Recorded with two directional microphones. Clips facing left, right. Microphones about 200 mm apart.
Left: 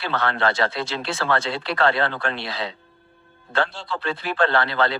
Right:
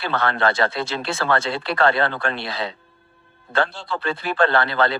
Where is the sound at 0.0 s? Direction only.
50° right (ahead or behind).